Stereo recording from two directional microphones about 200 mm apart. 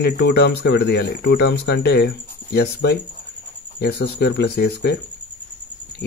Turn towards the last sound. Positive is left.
turn(degrees=55)  # may be behind; listen again after turning